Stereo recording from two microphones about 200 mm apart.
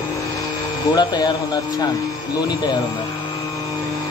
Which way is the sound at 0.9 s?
20° left (ahead or behind).